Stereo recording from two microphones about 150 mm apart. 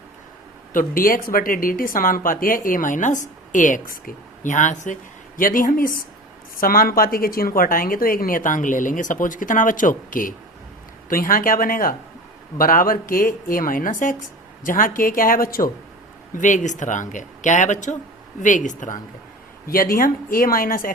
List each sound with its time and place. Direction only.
0.7 s speech: 65° left (ahead or behind)
5.4 s speech: 65° left (ahead or behind)
16.3 s speech: 55° left (ahead or behind)
19.6 s speech: 70° left (ahead or behind)